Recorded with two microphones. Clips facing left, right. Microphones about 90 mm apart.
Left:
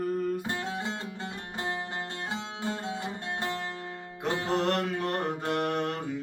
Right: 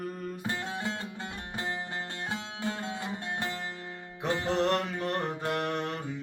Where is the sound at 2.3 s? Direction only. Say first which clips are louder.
Left 2 dB; 30° left (ahead or behind).